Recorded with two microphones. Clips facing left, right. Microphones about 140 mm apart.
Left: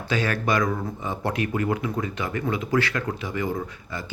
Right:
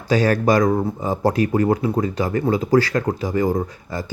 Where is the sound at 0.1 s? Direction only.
40° right (ahead or behind).